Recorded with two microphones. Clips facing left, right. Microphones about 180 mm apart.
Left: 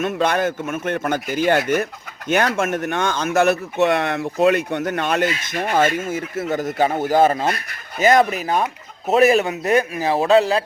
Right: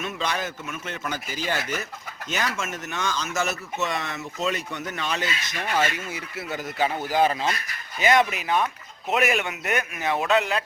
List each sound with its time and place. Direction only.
0.0 s a man's voice: 55° left (ahead or behind); by 10.6 s 35° left (ahead or behind)